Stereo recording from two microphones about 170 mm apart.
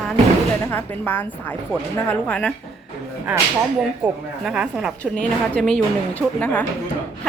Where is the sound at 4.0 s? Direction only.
5° right (ahead or behind).